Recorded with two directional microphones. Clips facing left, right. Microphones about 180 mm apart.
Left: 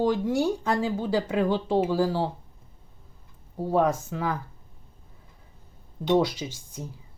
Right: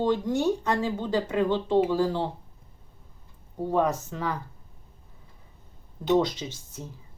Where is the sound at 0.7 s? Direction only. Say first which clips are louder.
Left 1 dB; 10° left (ahead or behind).